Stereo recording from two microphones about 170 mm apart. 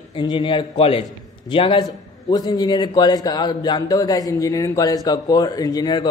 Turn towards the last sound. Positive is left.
turn(degrees=25)  # may be behind; listen again after turning